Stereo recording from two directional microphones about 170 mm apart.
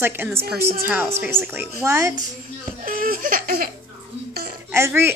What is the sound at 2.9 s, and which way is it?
Laughter, 55° right (ahead or behind).